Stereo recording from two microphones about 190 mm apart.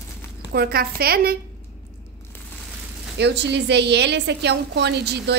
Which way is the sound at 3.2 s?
65° right (ahead or behind).